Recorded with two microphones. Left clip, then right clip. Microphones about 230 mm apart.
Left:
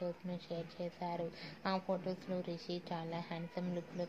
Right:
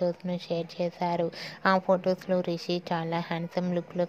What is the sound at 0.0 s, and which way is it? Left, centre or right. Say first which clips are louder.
A woman's voice: right 13 dB; right.